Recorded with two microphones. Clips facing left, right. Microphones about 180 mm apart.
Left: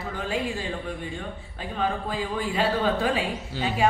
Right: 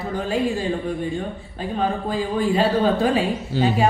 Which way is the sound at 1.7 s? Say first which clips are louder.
Right 4 dB; 40° right (ahead or behind).